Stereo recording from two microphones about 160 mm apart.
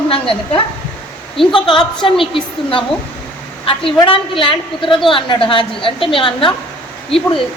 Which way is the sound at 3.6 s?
35° left (ahead or behind).